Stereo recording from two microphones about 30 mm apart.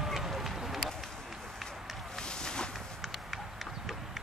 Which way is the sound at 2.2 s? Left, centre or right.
Left.